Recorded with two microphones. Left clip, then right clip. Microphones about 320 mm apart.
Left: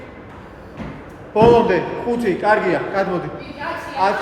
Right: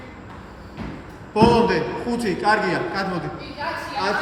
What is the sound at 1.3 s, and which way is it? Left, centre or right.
A man's voice, centre.